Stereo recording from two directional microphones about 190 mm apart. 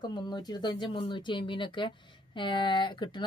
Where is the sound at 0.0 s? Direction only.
25° left (ahead or behind).